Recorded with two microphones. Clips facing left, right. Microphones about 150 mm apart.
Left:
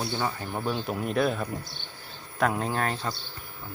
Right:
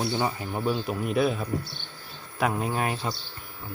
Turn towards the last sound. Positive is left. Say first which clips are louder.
# right 1 dB
turn(degrees=-10)  # may be behind; listen again after turning